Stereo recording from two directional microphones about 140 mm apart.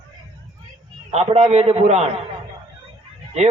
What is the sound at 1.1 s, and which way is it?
Speech, 50° right (ahead or behind).